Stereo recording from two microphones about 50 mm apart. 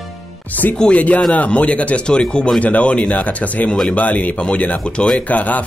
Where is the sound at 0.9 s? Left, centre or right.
Left.